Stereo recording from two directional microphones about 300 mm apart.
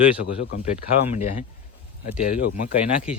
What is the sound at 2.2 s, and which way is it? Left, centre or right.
Speech, left.